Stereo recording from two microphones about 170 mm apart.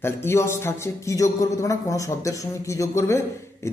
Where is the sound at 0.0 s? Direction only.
15° left (ahead or behind).